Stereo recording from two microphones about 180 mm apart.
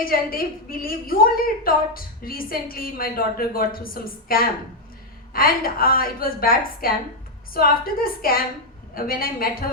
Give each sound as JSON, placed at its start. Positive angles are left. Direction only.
{"t": 0.0, "sound": "a woman's voice", "side_deg": 55}